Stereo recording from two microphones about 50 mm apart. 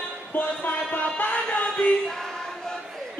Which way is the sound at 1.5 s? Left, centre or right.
Left.